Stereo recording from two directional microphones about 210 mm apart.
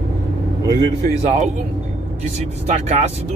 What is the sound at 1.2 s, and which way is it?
Speech, 30° right (ahead or behind).